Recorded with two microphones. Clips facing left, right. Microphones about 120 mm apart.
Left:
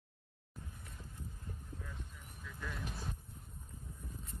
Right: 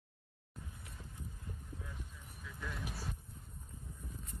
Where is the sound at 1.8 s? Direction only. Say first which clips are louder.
Even; 5° right (ahead or behind).